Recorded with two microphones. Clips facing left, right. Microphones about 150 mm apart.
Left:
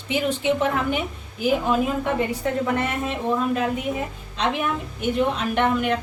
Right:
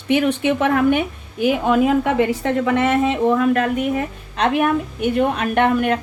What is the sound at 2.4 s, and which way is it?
A woman's voice, 90° right.